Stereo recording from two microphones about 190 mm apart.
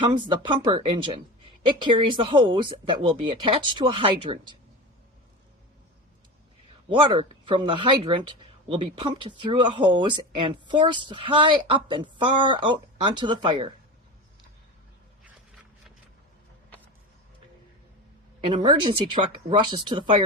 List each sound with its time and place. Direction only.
0.0 s speech: 25° right (ahead or behind)
6.8 s speech: 25° right (ahead or behind)
18.4 s speech: 25° right (ahead or behind)